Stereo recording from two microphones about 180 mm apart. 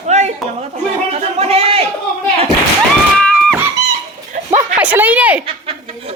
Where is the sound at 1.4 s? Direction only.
35° right (ahead or behind).